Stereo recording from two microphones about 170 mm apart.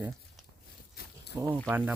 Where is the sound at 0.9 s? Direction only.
80° left.